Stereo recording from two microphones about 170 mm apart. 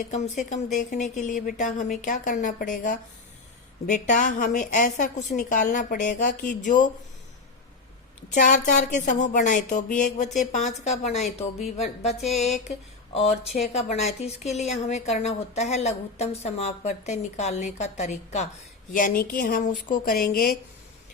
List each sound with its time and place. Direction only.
0.0 s speech: 45° left (ahead or behind)
3.8 s speech: 45° left (ahead or behind)
8.3 s speech: 50° left (ahead or behind)
18.9 s speech: 55° left (ahead or behind)